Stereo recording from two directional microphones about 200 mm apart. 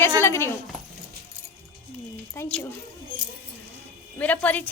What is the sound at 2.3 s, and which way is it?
Speech, 10° left (ahead or behind).